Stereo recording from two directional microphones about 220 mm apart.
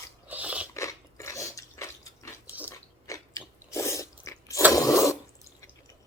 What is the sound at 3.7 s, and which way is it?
Biting, 15° left (ahead or behind).